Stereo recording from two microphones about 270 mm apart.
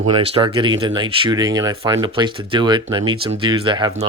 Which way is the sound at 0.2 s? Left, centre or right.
Centre.